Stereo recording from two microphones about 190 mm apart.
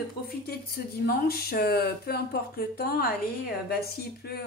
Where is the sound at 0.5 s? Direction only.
55° left (ahead or behind).